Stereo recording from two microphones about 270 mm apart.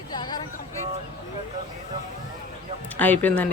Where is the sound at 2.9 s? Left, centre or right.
Centre.